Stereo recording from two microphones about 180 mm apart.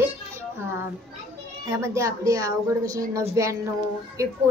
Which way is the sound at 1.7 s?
15° right (ahead or behind).